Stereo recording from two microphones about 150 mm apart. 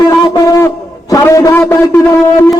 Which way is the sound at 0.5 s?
20° left (ahead or behind).